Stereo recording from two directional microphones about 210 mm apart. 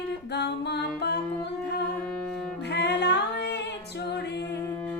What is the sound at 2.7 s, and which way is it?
Music, 55° left (ahead or behind).